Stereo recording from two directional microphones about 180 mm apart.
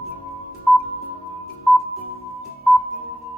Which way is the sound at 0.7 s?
Centre (ahead or behind).